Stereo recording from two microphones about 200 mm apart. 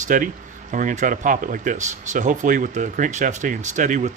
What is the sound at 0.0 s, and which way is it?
Speech, 40° right (ahead or behind).